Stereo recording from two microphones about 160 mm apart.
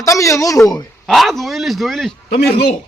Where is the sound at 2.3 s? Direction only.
80° left.